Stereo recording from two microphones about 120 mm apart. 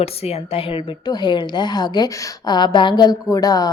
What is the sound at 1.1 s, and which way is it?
A woman's voice, 40° left (ahead or behind).